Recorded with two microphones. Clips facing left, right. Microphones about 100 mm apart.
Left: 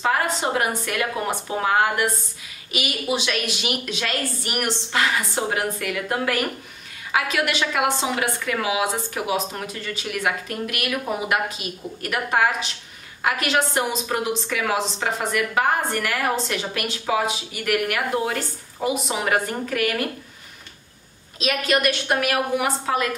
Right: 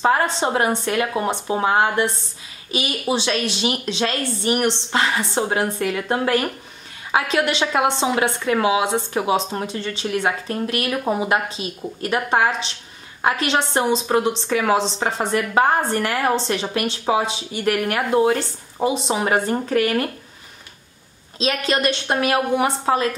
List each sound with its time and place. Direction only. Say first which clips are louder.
0.0 s a woman's voice: right 4 dB; 30° right (ahead or behind)
21.4 s a woman's voice: right 1 dB; 30° right (ahead or behind)